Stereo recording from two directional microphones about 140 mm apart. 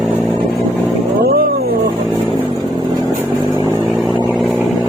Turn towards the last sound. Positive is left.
turn(degrees=30)  # may be behind; listen again after turning